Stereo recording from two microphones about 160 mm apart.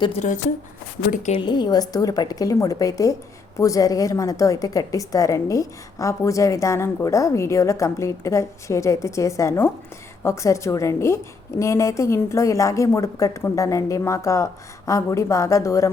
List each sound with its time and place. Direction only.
0.2 s speech: 45° left (ahead or behind)
1.3 s a woman's voice: 30° left (ahead or behind)